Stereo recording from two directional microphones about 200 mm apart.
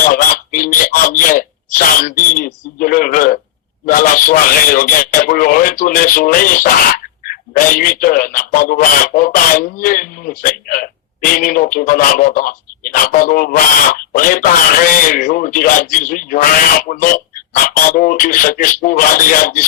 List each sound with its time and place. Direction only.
0.1 s speech: 45° left (ahead or behind)